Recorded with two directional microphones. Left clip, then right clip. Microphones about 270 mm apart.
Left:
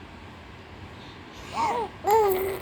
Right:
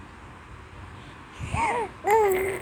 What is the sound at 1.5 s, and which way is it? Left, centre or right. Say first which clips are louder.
Babbling: even; right.